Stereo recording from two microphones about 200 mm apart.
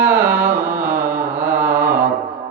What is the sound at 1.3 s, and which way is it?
Mantra, 10° right (ahead or behind).